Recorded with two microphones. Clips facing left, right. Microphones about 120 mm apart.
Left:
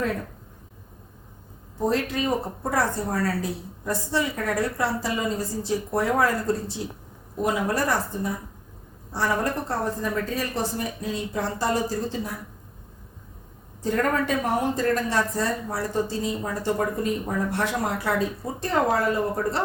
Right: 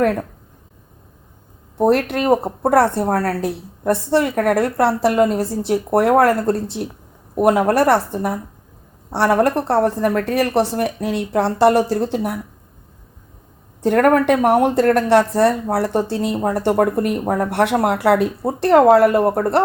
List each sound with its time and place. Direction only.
0.0 s speech: 70° right (ahead or behind)
1.8 s speech: 65° right (ahead or behind)
13.8 s speech: 70° right (ahead or behind)